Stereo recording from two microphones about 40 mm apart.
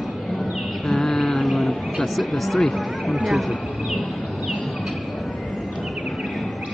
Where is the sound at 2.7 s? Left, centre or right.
Centre.